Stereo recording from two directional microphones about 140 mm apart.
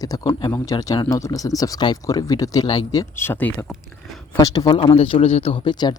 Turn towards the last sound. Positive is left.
turn(degrees=45)  # may be behind; listen again after turning